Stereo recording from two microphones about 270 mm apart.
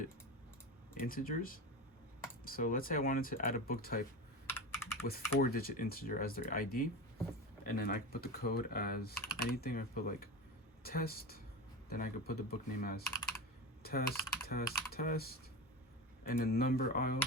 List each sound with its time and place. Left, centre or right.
0.9 s speech: left
4.4 s computer keyboard: centre
5.4 s speech: left